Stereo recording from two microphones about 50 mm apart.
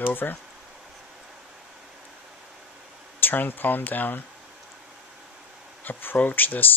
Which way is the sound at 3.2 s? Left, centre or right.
Left.